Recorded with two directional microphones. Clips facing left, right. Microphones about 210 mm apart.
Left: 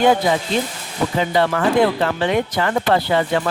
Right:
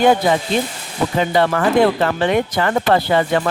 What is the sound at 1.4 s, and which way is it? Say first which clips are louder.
Speech: right 2 dB; 50° right (ahead or behind).